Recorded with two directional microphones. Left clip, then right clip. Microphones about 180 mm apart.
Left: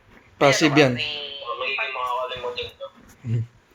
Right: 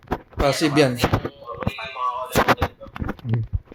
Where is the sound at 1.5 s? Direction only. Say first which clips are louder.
Left 4 dB; 40° left (ahead or behind).